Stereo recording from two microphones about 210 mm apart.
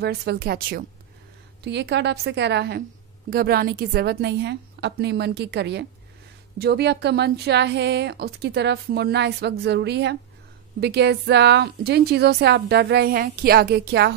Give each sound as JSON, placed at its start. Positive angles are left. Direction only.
{"t": 0.0, "sound": "a woman's voice", "side_deg": -50}